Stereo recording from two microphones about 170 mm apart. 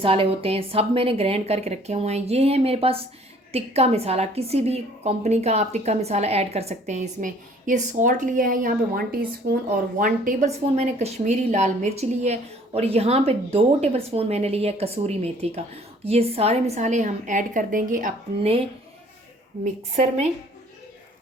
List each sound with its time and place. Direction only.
0.0 s a woman's voice: 30° right (ahead or behind); by 9.6 s 60° right (ahead or behind)
10.0 s a woman's voice: 45° right (ahead or behind)
19.6 s a woman's voice: 40° right (ahead or behind)